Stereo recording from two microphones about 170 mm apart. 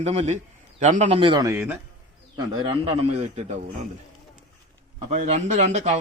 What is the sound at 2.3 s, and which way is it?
A man's voice, 30° right (ahead or behind).